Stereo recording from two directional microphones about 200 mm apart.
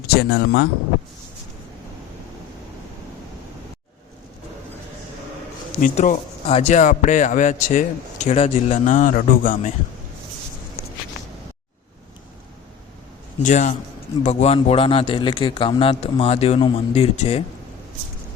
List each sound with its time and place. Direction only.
0.2 s speech: 55° left (ahead or behind)
5.8 s speech: 35° left (ahead or behind)
13.4 s a man's voice: 35° left (ahead or behind)